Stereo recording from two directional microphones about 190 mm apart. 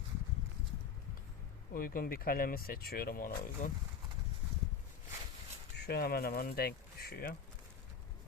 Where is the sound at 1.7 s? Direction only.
50° left (ahead or behind).